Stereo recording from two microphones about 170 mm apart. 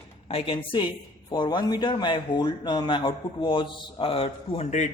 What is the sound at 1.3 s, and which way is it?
Speech, 25° left (ahead or behind).